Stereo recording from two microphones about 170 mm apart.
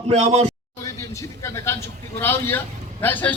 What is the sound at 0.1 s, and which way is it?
Speech, 40° right (ahead or behind).